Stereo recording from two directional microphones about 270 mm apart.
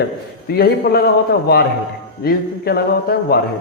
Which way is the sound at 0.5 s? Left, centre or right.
Left.